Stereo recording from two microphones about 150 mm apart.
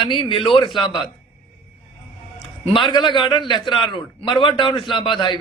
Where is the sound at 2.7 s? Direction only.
35° left (ahead or behind).